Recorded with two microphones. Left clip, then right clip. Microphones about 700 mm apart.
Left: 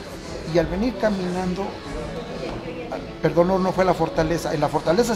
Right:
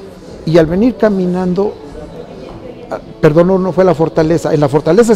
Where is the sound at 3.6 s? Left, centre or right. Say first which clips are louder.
Right 9 dB; right.